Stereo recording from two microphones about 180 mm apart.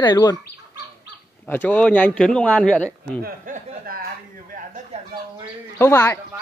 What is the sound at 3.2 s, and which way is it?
Speech, 55° right (ahead or behind).